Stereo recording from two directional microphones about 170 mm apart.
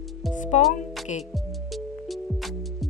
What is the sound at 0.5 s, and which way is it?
Speech, 40° left (ahead or behind).